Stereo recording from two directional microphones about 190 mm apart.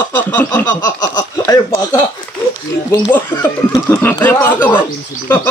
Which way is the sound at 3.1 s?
15° left (ahead or behind).